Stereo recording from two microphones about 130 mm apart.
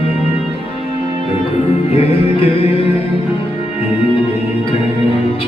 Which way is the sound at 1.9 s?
50° left (ahead or behind).